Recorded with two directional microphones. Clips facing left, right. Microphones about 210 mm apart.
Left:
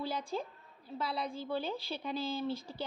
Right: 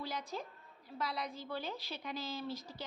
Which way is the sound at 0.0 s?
30° left (ahead or behind).